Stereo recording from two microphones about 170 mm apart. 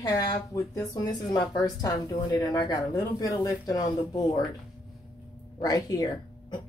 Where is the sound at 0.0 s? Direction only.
20° left (ahead or behind).